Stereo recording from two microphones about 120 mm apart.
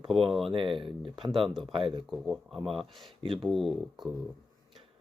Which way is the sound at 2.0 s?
Centre (ahead or behind).